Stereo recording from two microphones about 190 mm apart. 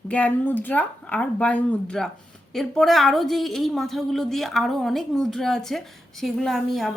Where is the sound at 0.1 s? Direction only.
5° left (ahead or behind).